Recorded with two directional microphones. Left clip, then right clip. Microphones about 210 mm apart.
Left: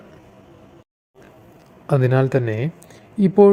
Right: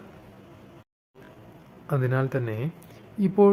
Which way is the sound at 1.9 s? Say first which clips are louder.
Left 9 dB; 25° left (ahead or behind).